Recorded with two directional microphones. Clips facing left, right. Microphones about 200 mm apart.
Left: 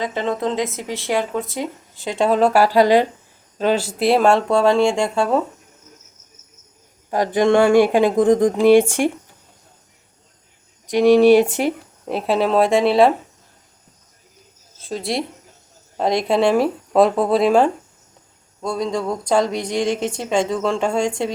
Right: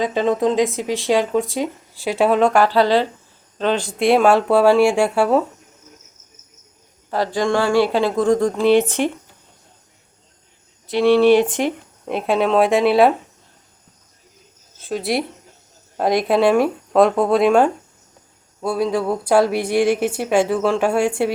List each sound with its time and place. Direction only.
0.0 s speech: 15° right (ahead or behind)
7.1 s speech: 15° left (ahead or behind)
10.8 s speech: 15° left (ahead or behind); by 13.1 s centre (ahead or behind)
14.8 s speech: centre (ahead or behind)